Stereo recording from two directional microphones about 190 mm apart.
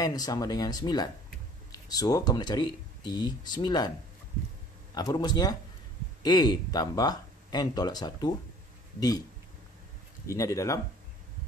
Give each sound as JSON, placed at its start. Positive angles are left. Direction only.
{"t": 0.0, "sound": "speech", "side_deg": 20}
{"t": 4.9, "sound": "speech", "side_deg": 20}
{"t": 10.2, "sound": "speech", "side_deg": 15}